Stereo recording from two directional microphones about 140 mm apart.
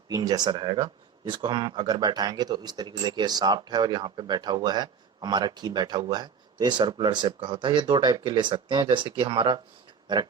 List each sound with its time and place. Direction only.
0.1 s speech: 25° right (ahead or behind)